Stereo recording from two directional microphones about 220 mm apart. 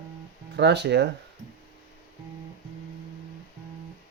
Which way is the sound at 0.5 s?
50° right (ahead or behind).